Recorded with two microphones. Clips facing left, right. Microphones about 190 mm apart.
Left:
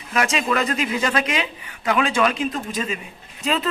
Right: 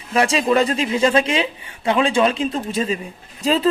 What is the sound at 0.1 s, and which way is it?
Speech, 30° right (ahead or behind).